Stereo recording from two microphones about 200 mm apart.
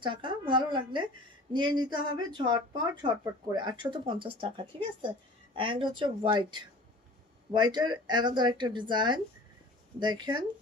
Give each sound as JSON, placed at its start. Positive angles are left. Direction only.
{"t": 0.0, "sound": "speech", "side_deg": -25}